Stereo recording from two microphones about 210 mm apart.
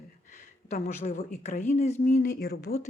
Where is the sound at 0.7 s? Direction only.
35° left (ahead or behind).